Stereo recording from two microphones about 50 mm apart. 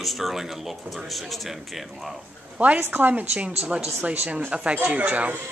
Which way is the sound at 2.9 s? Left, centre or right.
Right.